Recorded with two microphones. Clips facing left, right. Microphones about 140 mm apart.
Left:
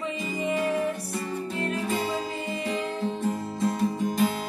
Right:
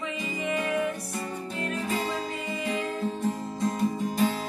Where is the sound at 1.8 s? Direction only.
5° left (ahead or behind).